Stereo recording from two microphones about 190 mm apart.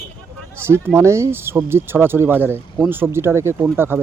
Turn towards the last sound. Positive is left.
turn(degrees=-10)  # may be behind; listen again after turning